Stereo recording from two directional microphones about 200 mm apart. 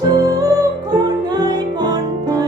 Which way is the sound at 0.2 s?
20° right (ahead or behind).